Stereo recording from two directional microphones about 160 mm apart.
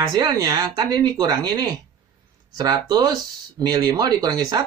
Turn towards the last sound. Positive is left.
turn(degrees=-25)  # may be behind; listen again after turning